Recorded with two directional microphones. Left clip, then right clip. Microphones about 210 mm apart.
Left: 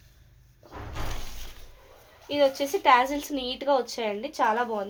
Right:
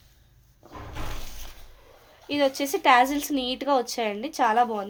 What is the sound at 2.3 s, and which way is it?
A woman's voice, 45° right (ahead or behind).